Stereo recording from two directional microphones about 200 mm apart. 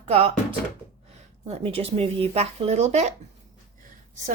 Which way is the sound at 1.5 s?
30° right (ahead or behind).